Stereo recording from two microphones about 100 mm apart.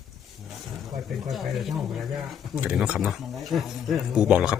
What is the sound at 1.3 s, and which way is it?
Speech, centre (ahead or behind).